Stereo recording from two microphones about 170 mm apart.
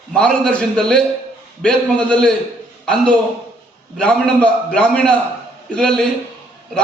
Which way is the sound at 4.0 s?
5° left (ahead or behind).